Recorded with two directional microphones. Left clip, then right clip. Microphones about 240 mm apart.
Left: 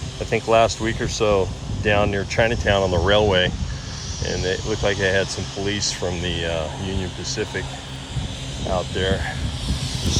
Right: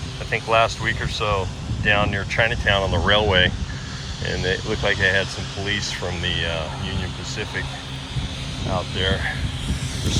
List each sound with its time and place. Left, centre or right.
0.3 s speech: left
9.0 s speech: left